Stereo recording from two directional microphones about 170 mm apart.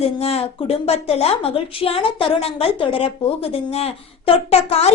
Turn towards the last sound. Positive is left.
turn(degrees=35)  # may be behind; listen again after turning